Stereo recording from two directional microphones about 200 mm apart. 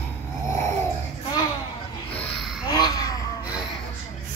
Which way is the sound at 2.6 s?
20° left (ahead or behind).